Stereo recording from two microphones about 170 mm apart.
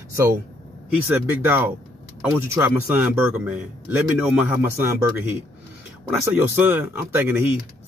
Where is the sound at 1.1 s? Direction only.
10° right (ahead or behind).